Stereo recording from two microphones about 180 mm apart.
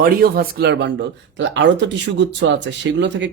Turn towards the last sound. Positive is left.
turn(degrees=-80)